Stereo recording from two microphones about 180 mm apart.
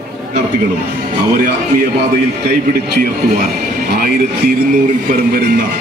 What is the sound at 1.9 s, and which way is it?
Speech, 60° right (ahead or behind).